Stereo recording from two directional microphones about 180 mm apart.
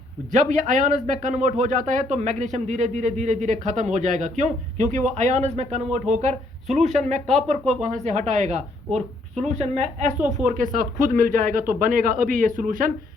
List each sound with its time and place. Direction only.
0.3 s speech: 45° right (ahead or behind)